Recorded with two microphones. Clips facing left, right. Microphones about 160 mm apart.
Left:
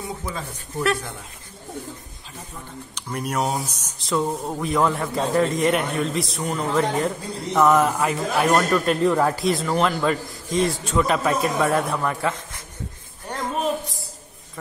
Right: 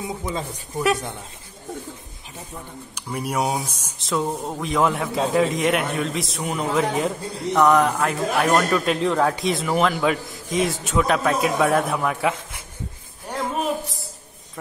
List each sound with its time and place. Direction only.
0.0 s speech: 20° right (ahead or behind)
2.9 s a man's voice: 10° right (ahead or behind)
13.3 s a sound: 10° right (ahead or behind)